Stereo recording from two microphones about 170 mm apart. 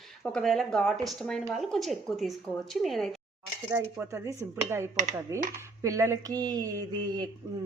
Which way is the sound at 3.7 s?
15° right (ahead or behind).